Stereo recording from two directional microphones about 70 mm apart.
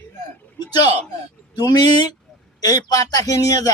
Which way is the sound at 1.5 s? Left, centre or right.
Left.